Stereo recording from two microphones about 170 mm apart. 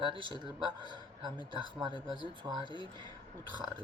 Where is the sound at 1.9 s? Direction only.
25° left (ahead or behind).